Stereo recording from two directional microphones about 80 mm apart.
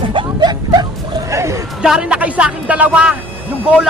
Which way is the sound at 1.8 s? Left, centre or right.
Centre.